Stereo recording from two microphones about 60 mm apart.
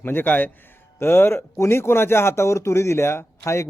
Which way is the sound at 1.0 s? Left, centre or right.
Left.